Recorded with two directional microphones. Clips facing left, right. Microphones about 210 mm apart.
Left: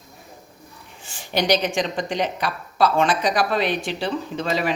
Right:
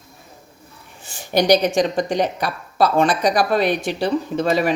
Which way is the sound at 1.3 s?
40° right (ahead or behind).